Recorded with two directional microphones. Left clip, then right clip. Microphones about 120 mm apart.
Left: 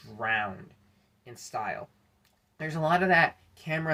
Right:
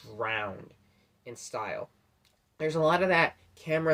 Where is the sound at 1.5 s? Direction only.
30° right (ahead or behind).